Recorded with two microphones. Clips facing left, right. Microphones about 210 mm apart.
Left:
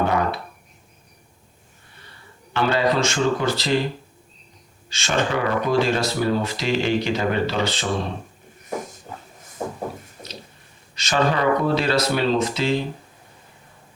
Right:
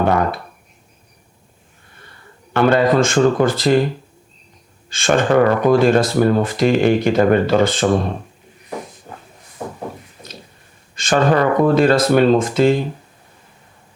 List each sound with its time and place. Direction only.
0.1 s a sound: 50° right (ahead or behind)
2.5 s speech: 50° right (ahead or behind)
4.9 s speech: 50° right (ahead or behind)
10.9 s speech: 50° right (ahead or behind)